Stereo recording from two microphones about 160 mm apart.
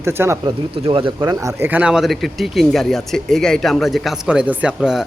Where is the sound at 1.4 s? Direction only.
15° right (ahead or behind).